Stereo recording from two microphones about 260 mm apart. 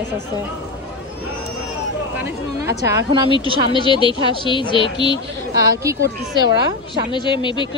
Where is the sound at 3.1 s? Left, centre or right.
Centre.